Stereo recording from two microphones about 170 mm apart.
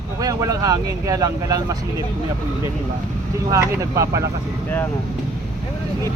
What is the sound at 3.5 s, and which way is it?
Speech, 20° right (ahead or behind).